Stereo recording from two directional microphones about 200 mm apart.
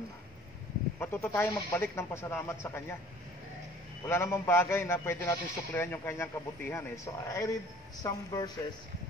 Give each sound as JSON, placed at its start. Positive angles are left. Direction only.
{"t": 0.9, "sound": "a man's voice", "side_deg": 10}
{"t": 4.0, "sound": "a man's voice", "side_deg": 10}